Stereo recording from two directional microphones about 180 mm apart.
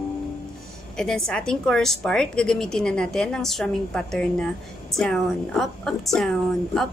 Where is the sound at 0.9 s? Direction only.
5° left (ahead or behind).